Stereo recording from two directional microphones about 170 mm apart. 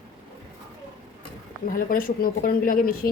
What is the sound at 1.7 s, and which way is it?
Speech, 55° left (ahead or behind).